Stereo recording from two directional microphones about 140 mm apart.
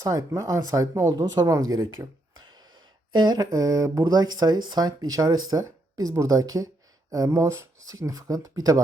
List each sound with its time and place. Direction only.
0.1 s speech: 25° right (ahead or behind)